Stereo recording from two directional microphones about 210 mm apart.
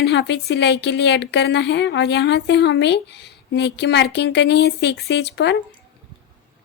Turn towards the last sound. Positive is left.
turn(degrees=55)  # may be behind; listen again after turning